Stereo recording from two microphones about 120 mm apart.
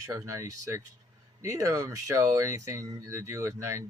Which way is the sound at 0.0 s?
30° right (ahead or behind).